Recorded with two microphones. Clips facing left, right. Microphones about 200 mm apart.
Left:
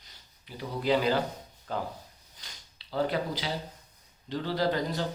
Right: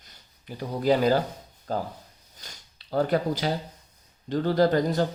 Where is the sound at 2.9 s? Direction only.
45° right (ahead or behind).